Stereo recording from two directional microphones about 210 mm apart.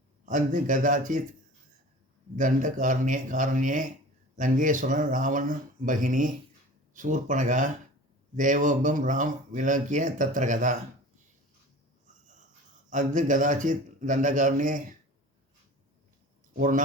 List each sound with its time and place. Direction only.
0.3 s speech: 35° right (ahead or behind)
2.3 s speech: 35° right (ahead or behind)
12.9 s speech: 35° right (ahead or behind)
16.6 s speech: 40° right (ahead or behind)